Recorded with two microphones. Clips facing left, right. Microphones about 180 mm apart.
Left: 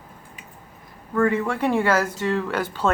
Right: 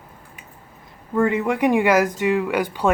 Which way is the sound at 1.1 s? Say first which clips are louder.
Right 2 dB; 20° right (ahead or behind).